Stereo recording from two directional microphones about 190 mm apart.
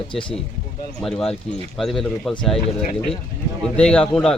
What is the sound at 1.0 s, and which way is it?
A man's voice, 5° left (ahead or behind).